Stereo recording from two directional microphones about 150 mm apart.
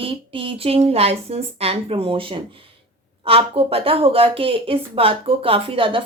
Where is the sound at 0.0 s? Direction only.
40° right (ahead or behind).